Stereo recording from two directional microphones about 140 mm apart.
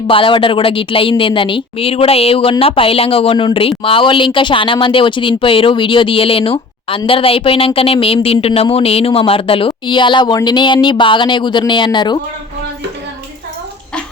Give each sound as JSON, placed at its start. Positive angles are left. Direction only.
{"t": 0.1, "sound": "speech", "side_deg": 40}